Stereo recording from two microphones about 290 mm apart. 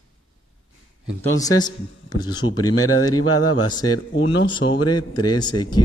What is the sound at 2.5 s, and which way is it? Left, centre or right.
Speech, left.